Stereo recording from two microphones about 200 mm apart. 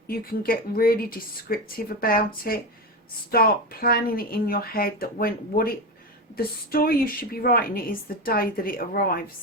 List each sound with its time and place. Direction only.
0.1 s a woman's voice: 45° left (ahead or behind)